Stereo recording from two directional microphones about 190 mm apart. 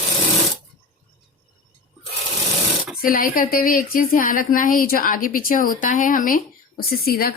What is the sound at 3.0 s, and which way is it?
Speech, 50° left (ahead or behind).